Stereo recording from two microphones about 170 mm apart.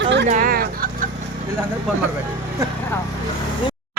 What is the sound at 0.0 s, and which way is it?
Vehicle, 90° right.